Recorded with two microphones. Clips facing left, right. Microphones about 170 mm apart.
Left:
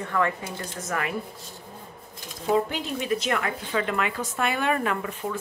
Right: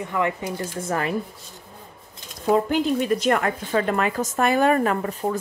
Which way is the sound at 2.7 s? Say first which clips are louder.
Right 7 dB; 45° right (ahead or behind).